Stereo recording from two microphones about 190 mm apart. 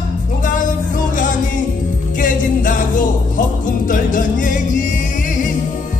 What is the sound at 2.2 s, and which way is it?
Music, 45° left (ahead or behind).